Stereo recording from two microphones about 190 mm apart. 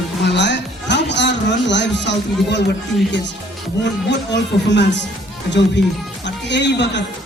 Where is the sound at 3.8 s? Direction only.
65° left (ahead or behind).